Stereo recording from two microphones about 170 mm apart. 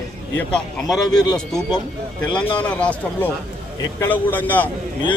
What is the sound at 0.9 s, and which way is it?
Speech, 25° left (ahead or behind).